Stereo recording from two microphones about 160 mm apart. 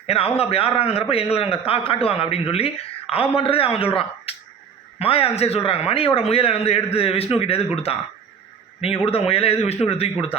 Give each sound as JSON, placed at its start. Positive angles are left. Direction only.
{"t": 0.0, "sound": "a man's voice", "side_deg": 40}
{"t": 4.3, "sound": "a sound", "side_deg": 35}
{"t": 4.9, "sound": "a man's voice", "side_deg": 35}